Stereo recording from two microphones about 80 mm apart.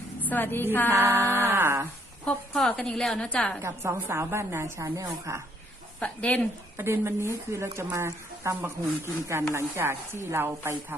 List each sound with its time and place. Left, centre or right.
0.2 s a woman's voice: left
0.9 s a sound: right
2.5 s a woman's voice: centre
3.6 s a woman's voice: right
6.0 s speech: centre
6.7 s a woman's voice: right